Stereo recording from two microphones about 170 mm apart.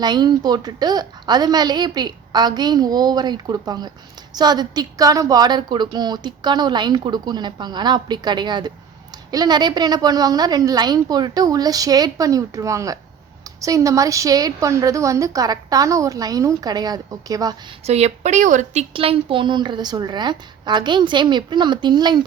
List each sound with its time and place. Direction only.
0.0 s speech: 25° right (ahead or behind)
17.8 s speech: 40° right (ahead or behind)